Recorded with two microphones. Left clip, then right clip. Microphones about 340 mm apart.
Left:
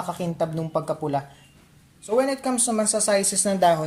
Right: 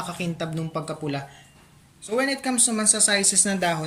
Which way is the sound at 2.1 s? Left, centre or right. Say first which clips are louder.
Left 2 dB; centre.